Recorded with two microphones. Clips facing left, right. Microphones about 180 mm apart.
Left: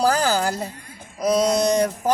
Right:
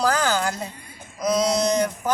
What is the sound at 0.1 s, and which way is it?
Speech, 35° left (ahead or behind).